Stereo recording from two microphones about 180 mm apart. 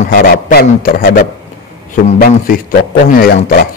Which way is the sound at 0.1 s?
55° left (ahead or behind).